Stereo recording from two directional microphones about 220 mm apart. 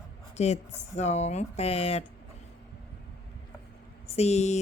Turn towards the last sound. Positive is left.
turn(degrees=30)  # may be behind; listen again after turning